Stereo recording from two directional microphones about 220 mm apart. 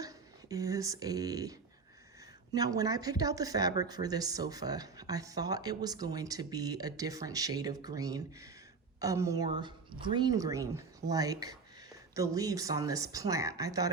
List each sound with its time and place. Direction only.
0.0 s speech: 15° right (ahead or behind)
2.6 s speech: 15° right (ahead or behind)